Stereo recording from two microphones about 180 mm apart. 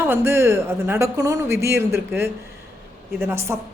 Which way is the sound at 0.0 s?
15° right (ahead or behind).